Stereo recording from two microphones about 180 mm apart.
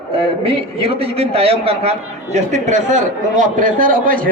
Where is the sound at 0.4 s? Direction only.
30° right (ahead or behind).